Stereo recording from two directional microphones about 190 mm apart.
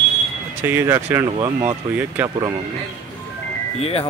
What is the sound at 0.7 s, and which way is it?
Speech, 15° right (ahead or behind).